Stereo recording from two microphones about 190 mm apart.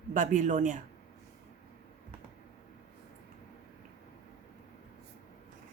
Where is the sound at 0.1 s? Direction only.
45° right (ahead or behind).